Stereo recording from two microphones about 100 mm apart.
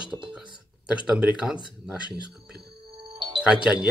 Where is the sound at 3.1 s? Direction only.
55° right (ahead or behind).